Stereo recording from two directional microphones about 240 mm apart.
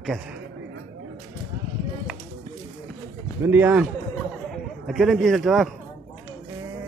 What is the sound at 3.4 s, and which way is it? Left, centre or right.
Speech, centre.